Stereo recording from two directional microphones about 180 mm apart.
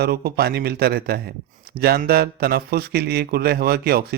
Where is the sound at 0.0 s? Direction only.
60° right (ahead or behind).